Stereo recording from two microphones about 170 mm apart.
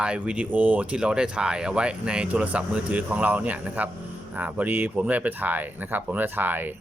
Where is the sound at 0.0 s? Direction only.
5° right (ahead or behind).